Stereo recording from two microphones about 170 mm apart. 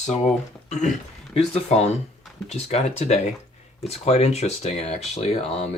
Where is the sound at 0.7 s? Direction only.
45° left (ahead or behind).